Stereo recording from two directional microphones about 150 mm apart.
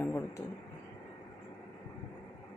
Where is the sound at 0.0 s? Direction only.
15° left (ahead or behind).